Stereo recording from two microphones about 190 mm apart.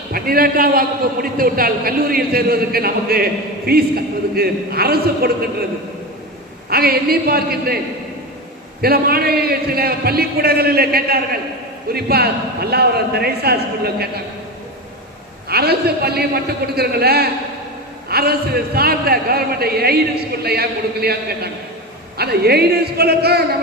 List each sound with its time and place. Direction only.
0.1 s a man's voice: 50° right (ahead or behind)
6.7 s a man's voice: 55° right (ahead or behind)
8.8 s a man's voice: 55° right (ahead or behind)
15.4 s a man's voice: 55° right (ahead or behind)